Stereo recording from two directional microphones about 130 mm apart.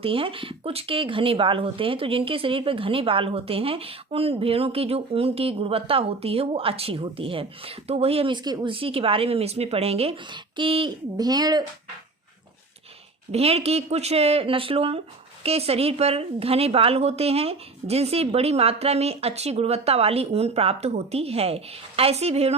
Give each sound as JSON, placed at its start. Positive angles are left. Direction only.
{"t": 0.0, "sound": "speech", "side_deg": -45}
{"t": 8.4, "sound": "speech", "side_deg": -35}
{"t": 11.2, "sound": "speech", "side_deg": -30}
{"t": 13.3, "sound": "speech", "side_deg": -50}